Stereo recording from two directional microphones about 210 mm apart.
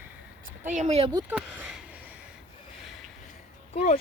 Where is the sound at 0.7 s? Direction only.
35° right (ahead or behind).